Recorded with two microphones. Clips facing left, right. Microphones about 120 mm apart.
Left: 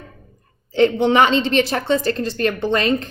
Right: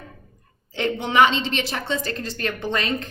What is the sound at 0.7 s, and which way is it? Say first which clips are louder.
A woman's voice: left 9 dB; 35° left (ahead or behind).